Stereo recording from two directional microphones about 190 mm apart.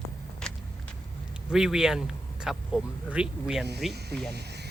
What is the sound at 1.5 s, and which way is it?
Speech, 5° right (ahead or behind).